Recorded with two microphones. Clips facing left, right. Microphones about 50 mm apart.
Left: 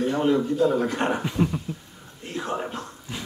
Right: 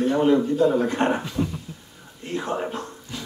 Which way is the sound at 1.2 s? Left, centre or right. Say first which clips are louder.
Left 2 dB; centre.